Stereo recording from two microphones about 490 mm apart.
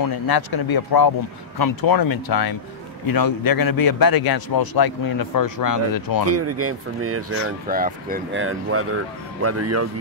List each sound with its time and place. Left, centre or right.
0.0 s a man's voice: left
6.2 s speech: right